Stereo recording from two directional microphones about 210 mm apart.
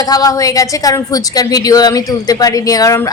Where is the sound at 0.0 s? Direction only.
15° left (ahead or behind).